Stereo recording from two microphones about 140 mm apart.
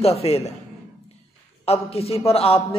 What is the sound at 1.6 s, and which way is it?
Speech, 45° left (ahead or behind).